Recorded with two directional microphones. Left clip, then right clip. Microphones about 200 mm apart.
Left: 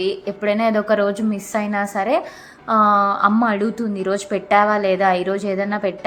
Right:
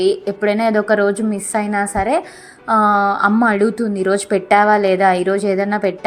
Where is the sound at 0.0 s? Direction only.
15° right (ahead or behind).